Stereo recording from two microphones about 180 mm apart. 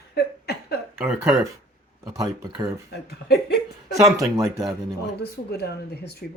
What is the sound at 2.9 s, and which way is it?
Speech, 65° left (ahead or behind).